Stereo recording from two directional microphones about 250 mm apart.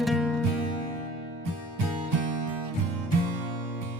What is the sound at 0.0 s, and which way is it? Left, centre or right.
Music, centre.